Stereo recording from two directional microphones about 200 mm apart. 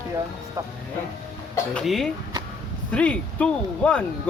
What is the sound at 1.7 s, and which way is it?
Speech, centre (ahead or behind).